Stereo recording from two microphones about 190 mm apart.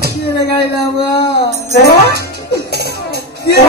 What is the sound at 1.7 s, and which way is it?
Speech, 55° left (ahead or behind).